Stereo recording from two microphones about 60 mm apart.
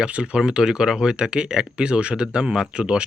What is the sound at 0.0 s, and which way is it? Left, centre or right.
Speech, centre.